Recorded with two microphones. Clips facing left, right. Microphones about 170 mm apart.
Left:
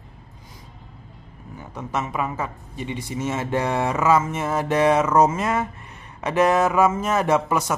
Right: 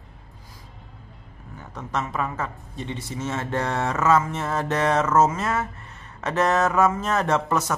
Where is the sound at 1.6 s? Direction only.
10° left (ahead or behind).